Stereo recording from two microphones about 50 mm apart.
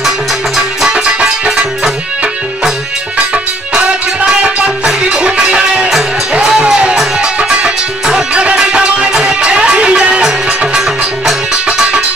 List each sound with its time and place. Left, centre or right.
0.6 s music: centre
4.4 s music: centre